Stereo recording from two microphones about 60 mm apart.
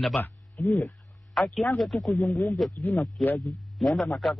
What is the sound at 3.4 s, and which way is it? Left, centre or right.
Speech, centre.